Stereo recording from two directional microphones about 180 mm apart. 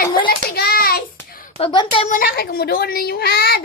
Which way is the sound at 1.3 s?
50° left (ahead or behind).